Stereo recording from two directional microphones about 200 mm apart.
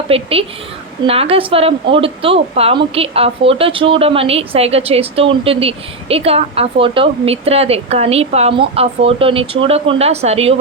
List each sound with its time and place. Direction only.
0.1 s a woman's voice: 30° right (ahead or behind)